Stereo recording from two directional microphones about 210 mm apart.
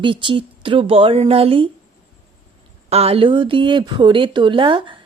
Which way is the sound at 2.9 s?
30° right (ahead or behind).